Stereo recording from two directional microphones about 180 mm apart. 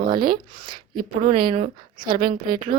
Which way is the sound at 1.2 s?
40° right (ahead or behind).